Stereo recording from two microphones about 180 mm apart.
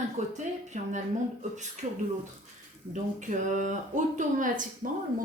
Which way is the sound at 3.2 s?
45° right (ahead or behind).